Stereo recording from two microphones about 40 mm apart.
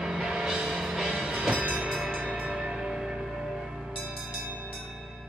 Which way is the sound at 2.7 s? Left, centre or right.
Centre.